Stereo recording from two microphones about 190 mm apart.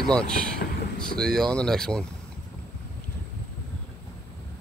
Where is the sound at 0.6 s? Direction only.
55° left (ahead or behind).